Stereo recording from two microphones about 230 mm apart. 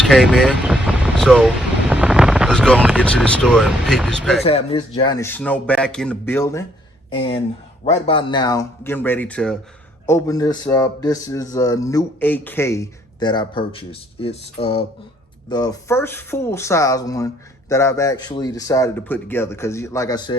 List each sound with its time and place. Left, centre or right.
0.0 s speech: centre
4.4 s speech: left